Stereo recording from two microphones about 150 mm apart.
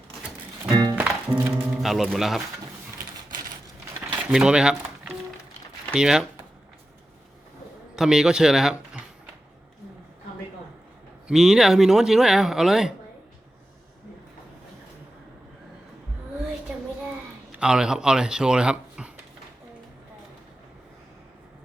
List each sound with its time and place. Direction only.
0.6 s music: 25° right (ahead or behind)
0.9 s music: 10° right (ahead or behind)
4.1 s speech: 10° right (ahead or behind)
5.9 s speech: 5° right (ahead or behind)
7.9 s speech: 5° right (ahead or behind)
11.3 s speech: 5° right (ahead or behind)
17.5 s speech: 5° right (ahead or behind)